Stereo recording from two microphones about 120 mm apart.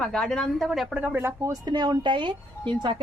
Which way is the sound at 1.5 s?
35° right (ahead or behind).